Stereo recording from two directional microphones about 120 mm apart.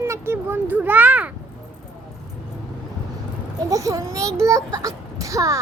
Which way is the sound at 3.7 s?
30° right (ahead or behind).